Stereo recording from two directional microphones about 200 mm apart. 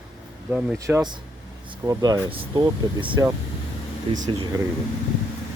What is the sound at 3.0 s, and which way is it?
Speech, 15° right (ahead or behind).